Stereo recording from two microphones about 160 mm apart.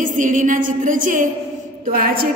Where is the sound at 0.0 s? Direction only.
55° right (ahead or behind).